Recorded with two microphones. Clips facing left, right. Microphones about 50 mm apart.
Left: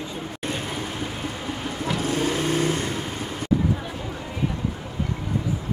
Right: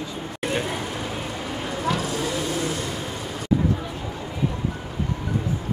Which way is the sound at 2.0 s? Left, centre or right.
Left.